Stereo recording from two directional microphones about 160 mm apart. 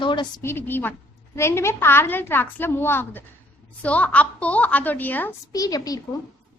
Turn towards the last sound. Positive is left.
turn(degrees=20)  # may be behind; listen again after turning